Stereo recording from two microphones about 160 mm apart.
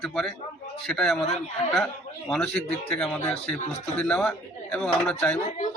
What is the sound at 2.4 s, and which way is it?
A man's voice, 5° left (ahead or behind).